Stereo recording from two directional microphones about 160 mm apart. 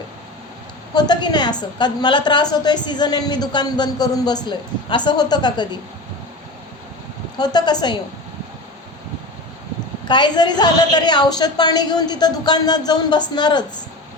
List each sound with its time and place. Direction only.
0.9 s a woman's voice: 25° left (ahead or behind)
7.3 s a woman's voice: 25° left (ahead or behind)
10.1 s a woman's voice: 25° left (ahead or behind)